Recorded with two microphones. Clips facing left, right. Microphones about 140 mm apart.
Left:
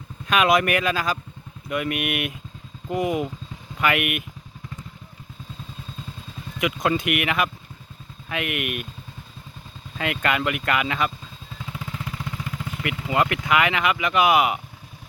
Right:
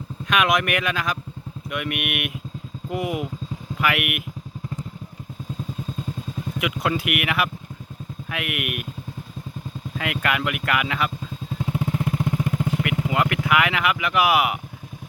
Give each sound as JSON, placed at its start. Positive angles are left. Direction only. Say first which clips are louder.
{"t": 0.3, "sound": "speech", "louder": "left 2 dB", "side_deg": 0}
{"t": 6.6, "sound": "speech", "louder": "left 2 dB", "side_deg": -5}
{"t": 10.0, "sound": "speech", "louder": "left 1 dB", "side_deg": -5}
{"t": 11.5, "sound": "vehicle", "louder": "right 9 dB", "side_deg": -45}
{"t": 13.1, "sound": "speech", "louder": "left 2 dB", "side_deg": -5}